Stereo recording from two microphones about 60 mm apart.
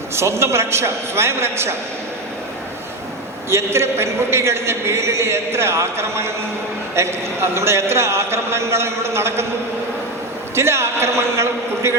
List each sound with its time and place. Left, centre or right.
0.2 s a man's voice: right
3.5 s a man's voice: right
10.5 s a man's voice: right